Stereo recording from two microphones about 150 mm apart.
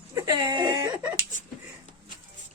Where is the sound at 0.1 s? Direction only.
25° right (ahead or behind).